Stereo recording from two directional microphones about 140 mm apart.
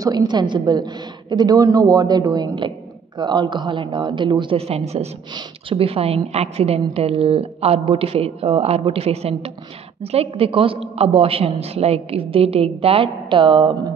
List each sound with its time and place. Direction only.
0.0 s a woman's voice: 25° right (ahead or behind)